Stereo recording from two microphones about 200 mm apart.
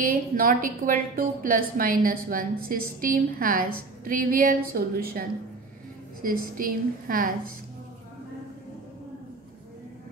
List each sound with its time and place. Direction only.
0.0 s a woman's voice: 45° right (ahead or behind)
6.2 s a woman's voice: 45° right (ahead or behind)